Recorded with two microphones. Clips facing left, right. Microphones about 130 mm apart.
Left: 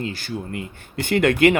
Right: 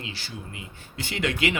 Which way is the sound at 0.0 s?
50° left (ahead or behind).